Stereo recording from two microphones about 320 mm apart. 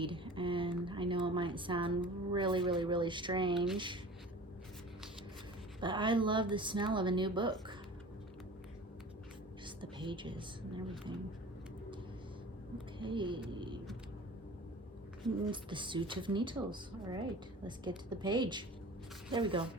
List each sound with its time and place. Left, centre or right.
0.0 s speech: centre
5.8 s speech: centre
9.6 s a sound: centre
10.8 s speech: centre
13.0 s speech: centre
15.4 s speech: centre